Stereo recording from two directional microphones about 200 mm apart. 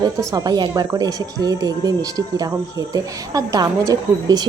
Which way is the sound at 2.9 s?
15° right (ahead or behind).